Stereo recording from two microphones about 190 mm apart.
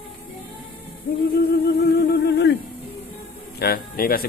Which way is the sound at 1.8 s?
55° left (ahead or behind).